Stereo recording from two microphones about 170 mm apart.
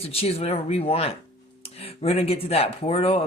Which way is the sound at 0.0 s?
35° left (ahead or behind).